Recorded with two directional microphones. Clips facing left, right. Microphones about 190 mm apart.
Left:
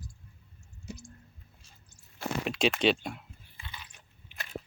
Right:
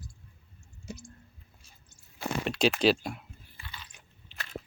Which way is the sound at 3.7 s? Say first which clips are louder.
Even; 15° left (ahead or behind).